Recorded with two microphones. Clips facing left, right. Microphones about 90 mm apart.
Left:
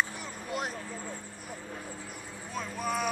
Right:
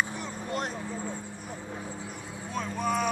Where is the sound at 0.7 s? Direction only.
15° right (ahead or behind).